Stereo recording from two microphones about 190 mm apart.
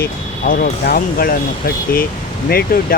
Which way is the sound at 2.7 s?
50° left (ahead or behind).